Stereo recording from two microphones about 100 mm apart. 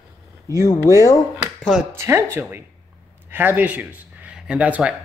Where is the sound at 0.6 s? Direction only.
30° left (ahead or behind).